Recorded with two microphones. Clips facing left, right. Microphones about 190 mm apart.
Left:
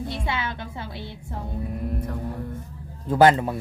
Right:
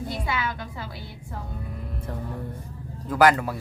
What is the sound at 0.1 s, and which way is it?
Music, 25° left (ahead or behind).